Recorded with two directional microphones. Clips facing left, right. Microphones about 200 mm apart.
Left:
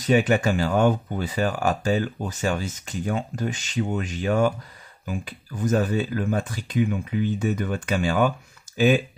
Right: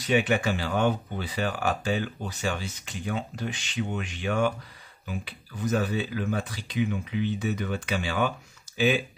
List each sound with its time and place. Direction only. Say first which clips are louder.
0.0 s speech: left 4 dB; 40° left (ahead or behind)